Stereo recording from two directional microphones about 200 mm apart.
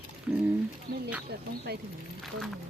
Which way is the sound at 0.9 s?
45° right (ahead or behind).